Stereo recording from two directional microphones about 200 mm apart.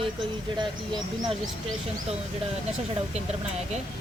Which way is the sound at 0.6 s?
25° right (ahead or behind).